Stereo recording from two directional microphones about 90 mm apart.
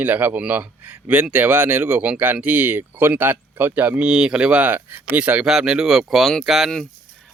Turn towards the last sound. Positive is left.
turn(degrees=-5)  # may be behind; listen again after turning